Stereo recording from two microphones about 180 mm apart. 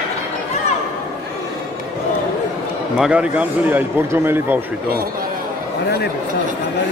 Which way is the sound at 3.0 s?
5° right (ahead or behind).